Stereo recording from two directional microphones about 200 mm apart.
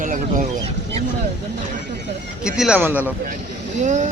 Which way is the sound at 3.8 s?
35° right (ahead or behind).